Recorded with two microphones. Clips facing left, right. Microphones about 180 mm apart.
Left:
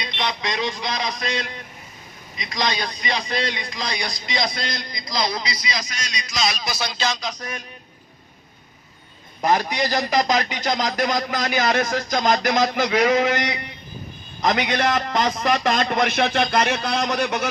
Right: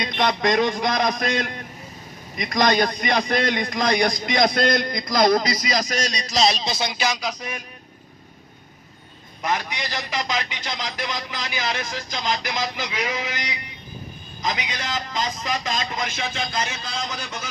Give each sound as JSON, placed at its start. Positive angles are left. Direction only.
{"t": 0.0, "sound": "a man's voice", "side_deg": -50}
{"t": 9.4, "sound": "a man's voice", "side_deg": 35}